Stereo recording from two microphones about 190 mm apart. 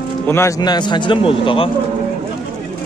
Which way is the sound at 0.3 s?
15° left (ahead or behind).